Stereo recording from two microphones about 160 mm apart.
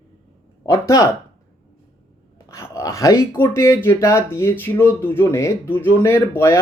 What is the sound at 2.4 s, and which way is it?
Speech, 20° left (ahead or behind).